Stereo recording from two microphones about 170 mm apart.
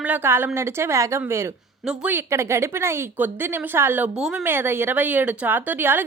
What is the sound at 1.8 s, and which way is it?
Speech, 5° right (ahead or behind).